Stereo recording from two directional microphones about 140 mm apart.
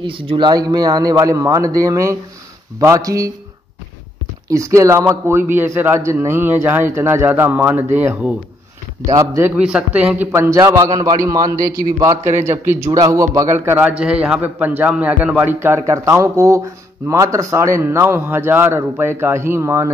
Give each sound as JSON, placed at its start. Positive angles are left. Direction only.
{"t": 0.0, "sound": "speech", "side_deg": -40}
{"t": 4.5, "sound": "a man's voice", "side_deg": -20}
{"t": 9.0, "sound": "speech", "side_deg": -25}
{"t": 9.6, "sound": "a man's voice", "side_deg": -10}